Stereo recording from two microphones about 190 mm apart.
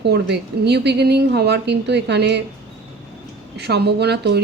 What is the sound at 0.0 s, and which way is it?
Speech, 60° right (ahead or behind).